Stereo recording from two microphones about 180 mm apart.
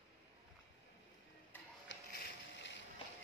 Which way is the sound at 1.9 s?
70° left (ahead or behind).